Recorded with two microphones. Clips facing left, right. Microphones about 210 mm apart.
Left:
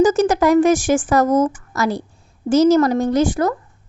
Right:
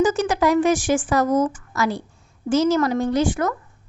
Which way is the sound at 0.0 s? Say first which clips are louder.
Left 5 dB; 40° left (ahead or behind).